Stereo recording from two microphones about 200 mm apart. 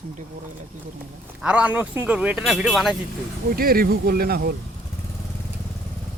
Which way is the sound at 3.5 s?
45° right (ahead or behind).